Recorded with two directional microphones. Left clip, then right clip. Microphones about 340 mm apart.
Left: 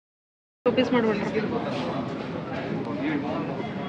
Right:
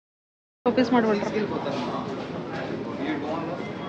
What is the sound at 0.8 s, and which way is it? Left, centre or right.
Speech, centre.